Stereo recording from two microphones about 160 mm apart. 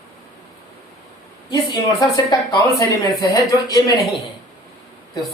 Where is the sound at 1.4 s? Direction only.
25° left (ahead or behind).